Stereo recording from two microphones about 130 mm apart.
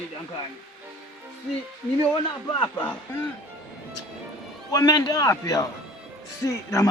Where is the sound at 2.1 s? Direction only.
35° left (ahead or behind).